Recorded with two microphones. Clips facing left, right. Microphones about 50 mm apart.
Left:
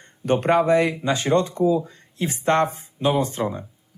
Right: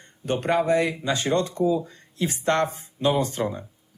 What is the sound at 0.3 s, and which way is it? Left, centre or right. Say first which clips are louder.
Speech: left 4 dB; left.